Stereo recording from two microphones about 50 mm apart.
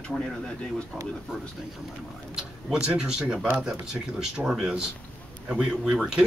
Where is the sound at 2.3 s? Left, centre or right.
Centre.